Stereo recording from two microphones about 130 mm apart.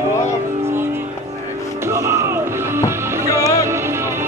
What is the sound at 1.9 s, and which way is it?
Music, 25° right (ahead or behind).